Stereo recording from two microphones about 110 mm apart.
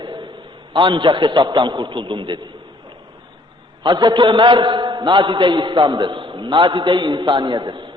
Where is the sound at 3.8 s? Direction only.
45° right (ahead or behind).